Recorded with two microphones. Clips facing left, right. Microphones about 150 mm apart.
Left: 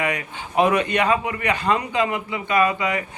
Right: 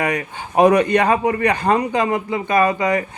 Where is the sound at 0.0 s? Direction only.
40° right (ahead or behind).